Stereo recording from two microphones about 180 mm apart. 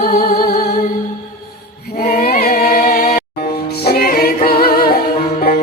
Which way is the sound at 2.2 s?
55° left (ahead or behind).